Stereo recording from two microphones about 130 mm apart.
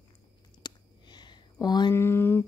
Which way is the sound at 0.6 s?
35° left (ahead or behind).